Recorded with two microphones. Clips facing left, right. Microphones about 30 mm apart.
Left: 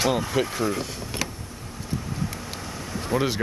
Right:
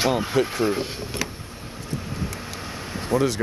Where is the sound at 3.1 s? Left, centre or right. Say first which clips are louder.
Right 3 dB; left.